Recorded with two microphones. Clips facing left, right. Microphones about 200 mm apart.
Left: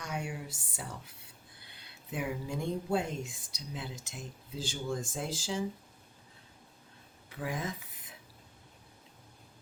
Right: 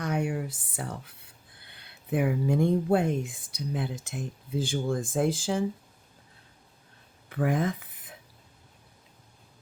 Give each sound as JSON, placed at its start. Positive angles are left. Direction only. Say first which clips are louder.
{"t": 0.0, "sound": "a sound", "louder": "right 9 dB", "side_deg": -55}
{"t": 1.7, "sound": "speech", "louder": "right 11 dB", "side_deg": -55}
{"t": 7.3, "sound": "speech", "louder": "right 10 dB", "side_deg": -60}